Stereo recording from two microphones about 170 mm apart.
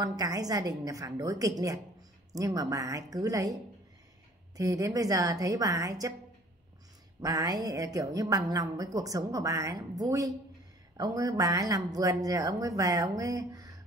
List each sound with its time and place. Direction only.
0.0 s a woman's voice: 20° right (ahead or behind)
4.6 s a woman's voice: 20° right (ahead or behind)
7.2 s a woman's voice: 20° right (ahead or behind)